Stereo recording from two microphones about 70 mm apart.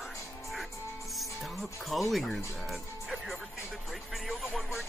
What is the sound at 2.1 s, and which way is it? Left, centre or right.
Speech, centre.